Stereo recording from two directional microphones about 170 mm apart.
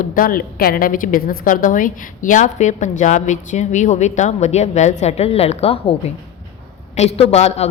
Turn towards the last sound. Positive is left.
turn(degrees=40)  # may be behind; listen again after turning